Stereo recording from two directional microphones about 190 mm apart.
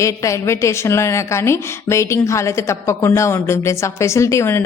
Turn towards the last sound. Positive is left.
turn(degrees=15)  # may be behind; listen again after turning